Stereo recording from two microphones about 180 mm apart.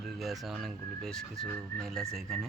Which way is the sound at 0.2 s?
Centre (ahead or behind).